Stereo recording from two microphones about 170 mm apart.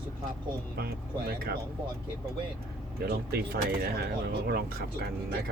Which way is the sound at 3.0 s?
65° right (ahead or behind).